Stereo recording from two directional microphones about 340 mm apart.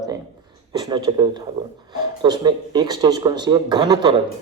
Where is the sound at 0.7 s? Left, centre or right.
Centre.